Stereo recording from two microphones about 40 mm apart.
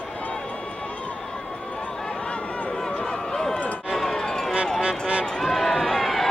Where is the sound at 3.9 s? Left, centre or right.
Centre.